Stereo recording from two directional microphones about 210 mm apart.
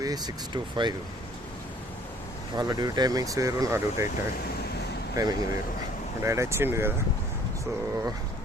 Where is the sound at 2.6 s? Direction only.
20° right (ahead or behind).